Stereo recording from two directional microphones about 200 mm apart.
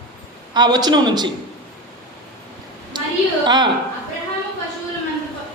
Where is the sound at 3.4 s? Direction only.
20° right (ahead or behind).